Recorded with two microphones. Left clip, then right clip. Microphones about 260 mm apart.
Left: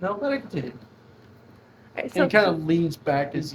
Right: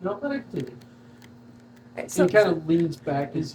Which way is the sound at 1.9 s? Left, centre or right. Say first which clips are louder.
Left 1 dB; left.